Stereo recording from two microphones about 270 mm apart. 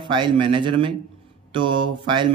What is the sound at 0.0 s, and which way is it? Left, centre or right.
A man's voice, centre.